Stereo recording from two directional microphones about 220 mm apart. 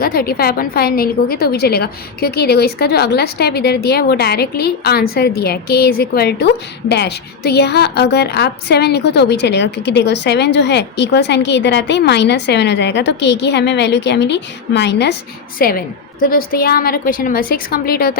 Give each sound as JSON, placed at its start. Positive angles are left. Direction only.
{"t": 0.0, "sound": "a woman's voice", "side_deg": 40}